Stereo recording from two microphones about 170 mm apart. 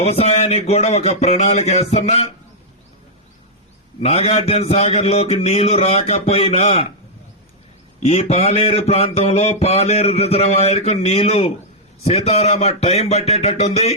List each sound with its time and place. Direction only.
0.0 s mantra: 40° left (ahead or behind)
4.0 s mantra: 35° left (ahead or behind)
8.0 s mantra: 35° left (ahead or behind)